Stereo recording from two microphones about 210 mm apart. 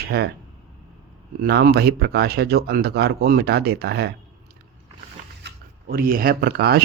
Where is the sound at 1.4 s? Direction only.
45° right (ahead or behind).